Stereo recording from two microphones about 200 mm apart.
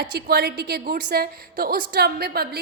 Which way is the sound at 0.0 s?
50° right (ahead or behind).